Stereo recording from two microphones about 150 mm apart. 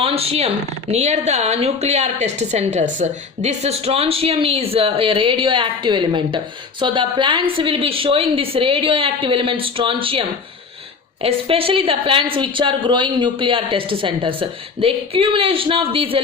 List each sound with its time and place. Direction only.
0.0 s speech: 40° right (ahead or behind)